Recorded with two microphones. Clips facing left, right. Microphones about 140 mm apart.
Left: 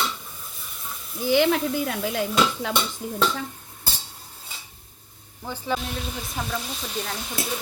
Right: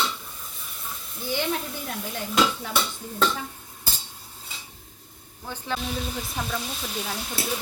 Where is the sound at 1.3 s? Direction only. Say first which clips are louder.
Left 8 dB; 90° left.